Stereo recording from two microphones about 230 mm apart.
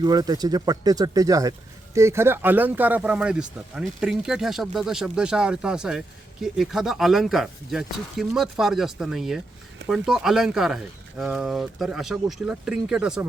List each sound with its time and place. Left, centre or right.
0.0 s speech: centre